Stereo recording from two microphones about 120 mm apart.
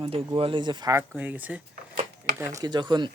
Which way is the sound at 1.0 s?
10° right (ahead or behind).